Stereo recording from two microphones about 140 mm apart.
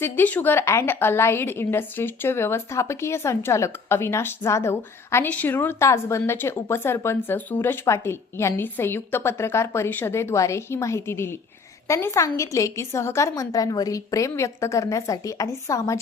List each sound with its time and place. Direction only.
0.0 s a woman's voice: 10° left (ahead or behind)